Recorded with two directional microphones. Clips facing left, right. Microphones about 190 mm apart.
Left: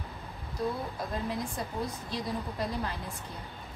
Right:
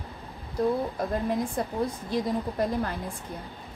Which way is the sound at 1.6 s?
55° right (ahead or behind).